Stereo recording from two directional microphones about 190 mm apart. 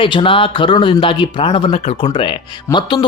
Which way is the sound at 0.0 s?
25° left (ahead or behind).